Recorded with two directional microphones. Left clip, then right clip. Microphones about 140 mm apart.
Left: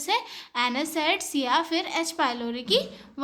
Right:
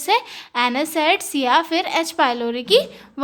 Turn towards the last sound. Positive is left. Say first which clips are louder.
# right 8 dB
turn(degrees=-45)  # may be behind; listen again after turning